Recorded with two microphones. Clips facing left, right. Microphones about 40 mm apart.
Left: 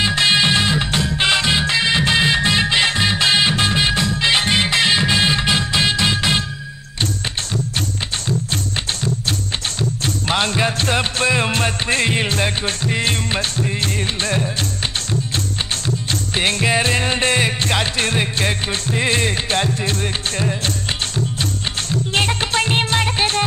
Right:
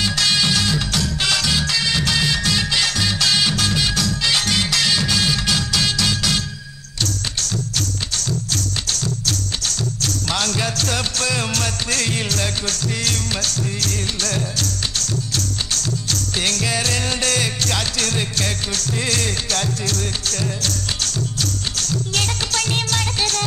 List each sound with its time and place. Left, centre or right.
0.0 s music: left
9.8 s music: left